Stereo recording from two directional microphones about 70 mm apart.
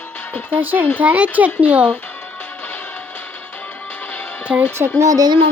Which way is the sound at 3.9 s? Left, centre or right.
Left.